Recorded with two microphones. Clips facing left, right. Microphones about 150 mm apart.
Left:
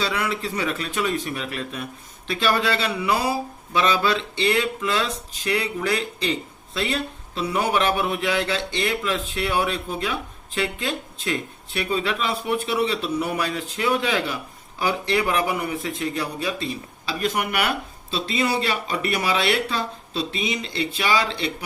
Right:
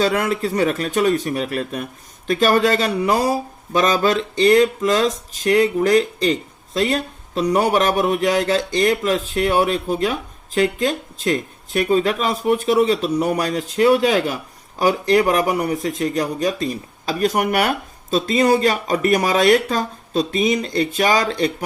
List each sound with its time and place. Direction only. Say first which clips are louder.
0.0 s speech: right 7 dB; 45° right (ahead or behind)